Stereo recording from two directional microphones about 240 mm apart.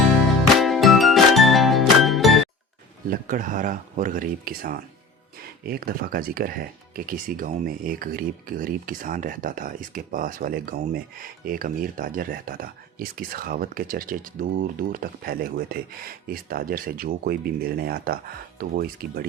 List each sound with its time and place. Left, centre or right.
0.6 s music: centre
3.1 s speech: right